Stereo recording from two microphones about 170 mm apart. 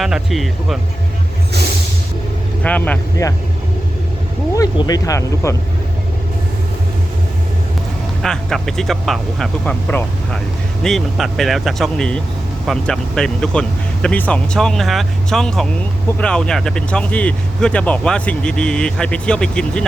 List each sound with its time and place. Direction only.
0.0 s speech: centre (ahead or behind)
2.6 s speech: 10° left (ahead or behind)
4.5 s speech: 20° left (ahead or behind)
8.2 s speech: centre (ahead or behind)